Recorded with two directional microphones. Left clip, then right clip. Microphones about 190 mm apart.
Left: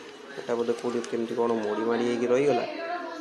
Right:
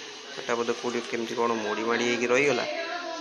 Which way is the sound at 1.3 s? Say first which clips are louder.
Even; centre (ahead or behind).